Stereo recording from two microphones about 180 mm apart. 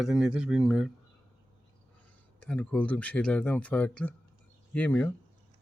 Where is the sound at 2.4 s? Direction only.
5° left (ahead or behind).